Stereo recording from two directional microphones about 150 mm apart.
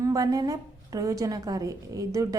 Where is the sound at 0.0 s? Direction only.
25° right (ahead or behind).